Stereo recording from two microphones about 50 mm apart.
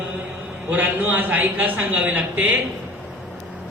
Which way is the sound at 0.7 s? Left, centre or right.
Right.